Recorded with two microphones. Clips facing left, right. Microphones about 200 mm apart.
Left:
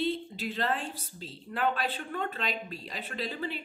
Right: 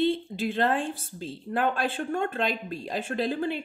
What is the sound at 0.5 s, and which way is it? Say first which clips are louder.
Speech: right 6 dB; 50° right (ahead or behind).